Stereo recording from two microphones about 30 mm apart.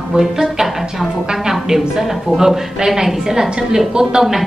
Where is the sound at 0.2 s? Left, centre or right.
Centre.